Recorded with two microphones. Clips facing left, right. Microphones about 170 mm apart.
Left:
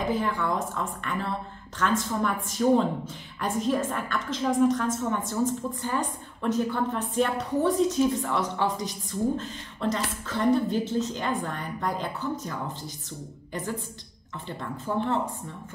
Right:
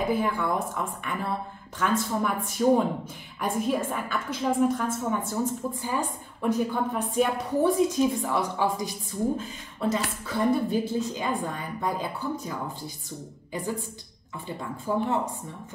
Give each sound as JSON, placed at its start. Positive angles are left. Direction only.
{"t": 0.0, "sound": "a woman's voice", "side_deg": -10}